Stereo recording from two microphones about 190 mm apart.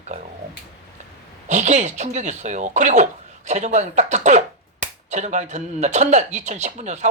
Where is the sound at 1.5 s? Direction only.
40° right (ahead or behind).